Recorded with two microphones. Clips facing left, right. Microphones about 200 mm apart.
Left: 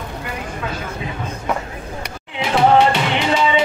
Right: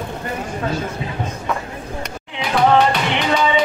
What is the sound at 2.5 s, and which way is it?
Music, 25° left (ahead or behind).